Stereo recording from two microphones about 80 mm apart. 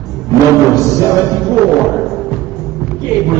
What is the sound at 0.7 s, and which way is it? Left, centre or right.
Music, right.